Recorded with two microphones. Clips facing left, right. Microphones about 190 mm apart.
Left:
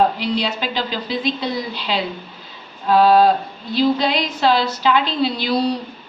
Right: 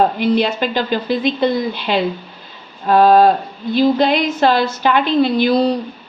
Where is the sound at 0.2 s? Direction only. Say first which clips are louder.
Right 6 dB; 50° right (ahead or behind).